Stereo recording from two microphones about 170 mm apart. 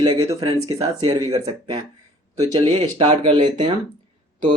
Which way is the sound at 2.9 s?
30° right (ahead or behind).